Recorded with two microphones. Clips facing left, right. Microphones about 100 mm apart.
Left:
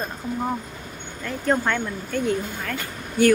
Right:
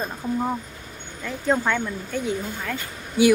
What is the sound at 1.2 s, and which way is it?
Speech, 5° right (ahead or behind).